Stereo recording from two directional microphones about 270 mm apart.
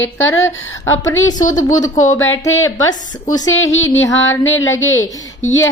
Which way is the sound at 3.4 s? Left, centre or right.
Left.